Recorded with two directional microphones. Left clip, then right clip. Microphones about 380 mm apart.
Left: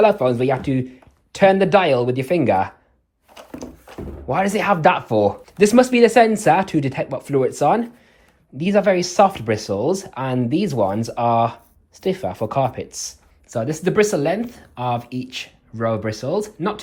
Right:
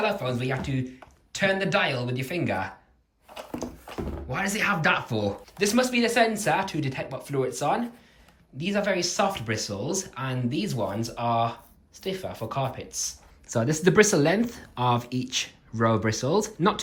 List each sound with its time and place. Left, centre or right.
0.0 s speech: centre
3.3 s a sound: centre
3.9 s thunk: centre
4.3 s speech: centre
13.5 s speech: centre